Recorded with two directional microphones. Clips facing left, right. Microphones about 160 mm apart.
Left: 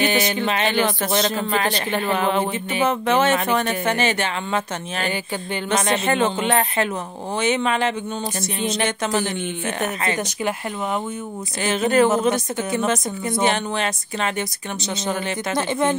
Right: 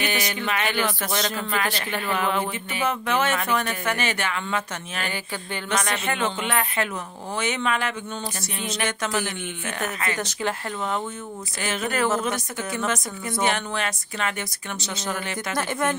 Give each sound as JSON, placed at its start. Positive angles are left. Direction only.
{"t": 0.0, "sound": "speech", "side_deg": 25}